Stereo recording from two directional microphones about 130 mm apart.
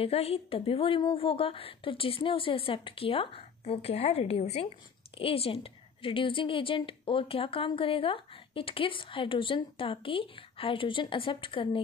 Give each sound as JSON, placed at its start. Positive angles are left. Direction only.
{"t": 0.0, "sound": "a woman's voice", "side_deg": 50}